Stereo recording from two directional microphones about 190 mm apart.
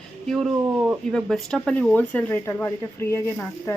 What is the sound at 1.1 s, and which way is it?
Speech, centre (ahead or behind).